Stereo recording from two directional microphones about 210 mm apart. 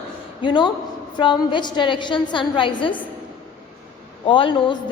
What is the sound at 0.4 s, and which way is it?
A woman's voice, 20° left (ahead or behind).